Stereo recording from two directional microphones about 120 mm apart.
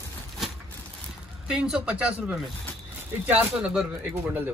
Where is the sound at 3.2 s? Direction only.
10° right (ahead or behind).